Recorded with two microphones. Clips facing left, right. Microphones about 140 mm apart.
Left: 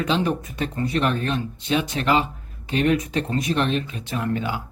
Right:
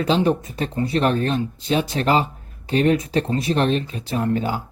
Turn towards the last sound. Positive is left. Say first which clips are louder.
# right 4 dB
turn(degrees=-35)  # may be behind; listen again after turning